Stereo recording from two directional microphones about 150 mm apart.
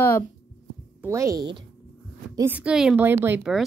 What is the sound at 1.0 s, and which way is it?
Speech, 20° right (ahead or behind).